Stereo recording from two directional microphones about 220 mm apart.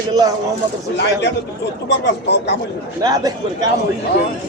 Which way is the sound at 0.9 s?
50° left (ahead or behind).